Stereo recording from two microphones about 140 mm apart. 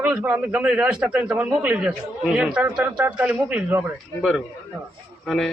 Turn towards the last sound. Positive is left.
turn(degrees=0)  # may be behind; listen again after turning